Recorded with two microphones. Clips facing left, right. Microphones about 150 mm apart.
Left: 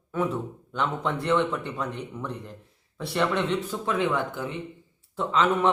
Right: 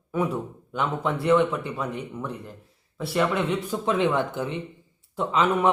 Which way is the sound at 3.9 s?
20° right (ahead or behind).